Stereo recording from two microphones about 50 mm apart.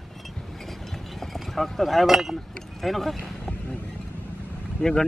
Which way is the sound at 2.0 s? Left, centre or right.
Centre.